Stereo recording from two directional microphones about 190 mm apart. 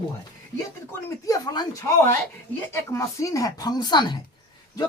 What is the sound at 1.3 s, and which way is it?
Speech, 20° left (ahead or behind).